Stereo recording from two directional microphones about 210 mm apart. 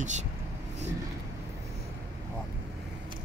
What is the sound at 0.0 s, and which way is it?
Speech, 35° right (ahead or behind).